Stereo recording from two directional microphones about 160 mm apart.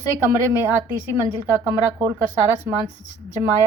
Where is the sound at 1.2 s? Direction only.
20° right (ahead or behind).